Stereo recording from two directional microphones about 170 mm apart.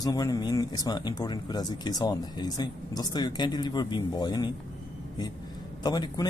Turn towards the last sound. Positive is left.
turn(degrees=25)  # may be behind; listen again after turning